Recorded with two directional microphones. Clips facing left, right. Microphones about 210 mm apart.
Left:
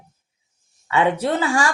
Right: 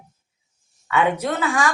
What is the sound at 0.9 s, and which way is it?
Speech, 30° left (ahead or behind).